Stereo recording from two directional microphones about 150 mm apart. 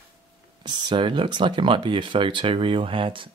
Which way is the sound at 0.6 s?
30° right (ahead or behind).